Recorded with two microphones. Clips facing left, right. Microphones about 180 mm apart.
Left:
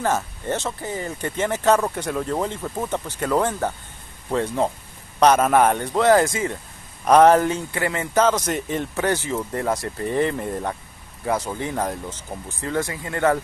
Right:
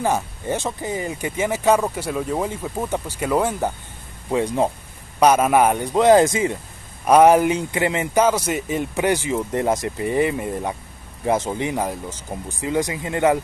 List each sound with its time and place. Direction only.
0.0 s speech: 15° right (ahead or behind)
11.2 s speech: 25° right (ahead or behind)